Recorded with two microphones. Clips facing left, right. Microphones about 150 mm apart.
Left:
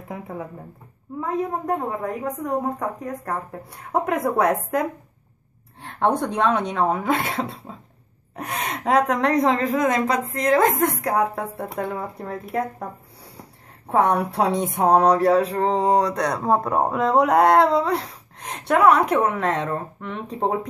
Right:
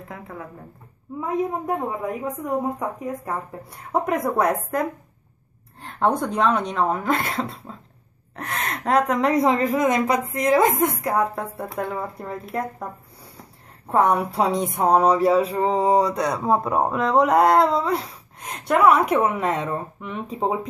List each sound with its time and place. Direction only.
0.1 s speech: 20° left (ahead or behind)
1.7 s speech: 10° right (ahead or behind)
13.8 s speech: centre (ahead or behind)